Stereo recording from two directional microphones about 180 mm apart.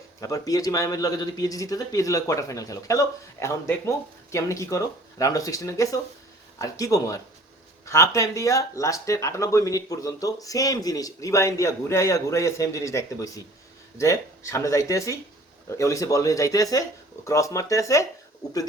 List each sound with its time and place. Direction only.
0.2 s speech: 20° left (ahead or behind)